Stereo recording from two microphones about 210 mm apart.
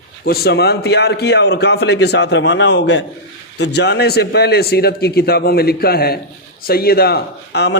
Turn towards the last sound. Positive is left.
turn(degrees=55)  # may be behind; listen again after turning